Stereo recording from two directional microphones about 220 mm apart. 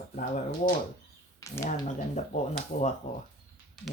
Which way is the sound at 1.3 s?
15° left (ahead or behind).